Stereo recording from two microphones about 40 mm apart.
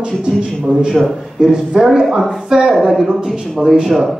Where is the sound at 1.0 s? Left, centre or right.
Centre.